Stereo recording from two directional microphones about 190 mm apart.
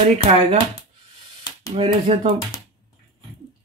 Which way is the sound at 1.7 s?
30° right (ahead or behind).